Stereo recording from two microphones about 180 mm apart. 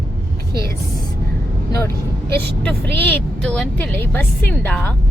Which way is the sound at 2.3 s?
10° left (ahead or behind).